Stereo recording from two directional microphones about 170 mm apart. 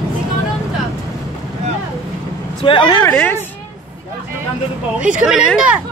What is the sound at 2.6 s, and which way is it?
Speech, 30° left (ahead or behind).